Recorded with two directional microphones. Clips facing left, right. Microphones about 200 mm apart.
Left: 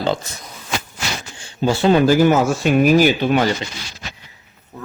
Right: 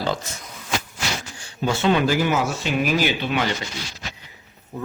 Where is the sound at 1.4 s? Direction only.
30° left (ahead or behind).